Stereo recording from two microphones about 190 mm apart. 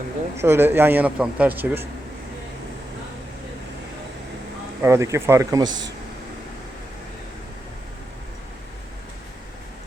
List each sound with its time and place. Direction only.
0.3 s speech: 15° right (ahead or behind)
4.8 s speech: 15° right (ahead or behind)
5.6 s speech: 80° right